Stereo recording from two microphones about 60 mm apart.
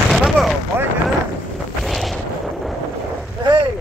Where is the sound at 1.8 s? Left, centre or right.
Centre.